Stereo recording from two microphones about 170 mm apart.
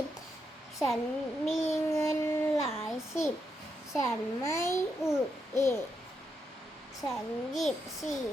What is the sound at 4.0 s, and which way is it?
Speech, 15° left (ahead or behind).